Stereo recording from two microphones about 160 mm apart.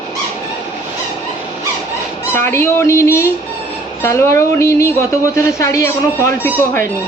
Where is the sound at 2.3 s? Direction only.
15° left (ahead or behind).